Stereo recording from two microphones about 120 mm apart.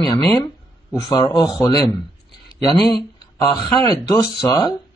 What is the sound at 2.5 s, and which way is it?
Speech, 35° left (ahead or behind).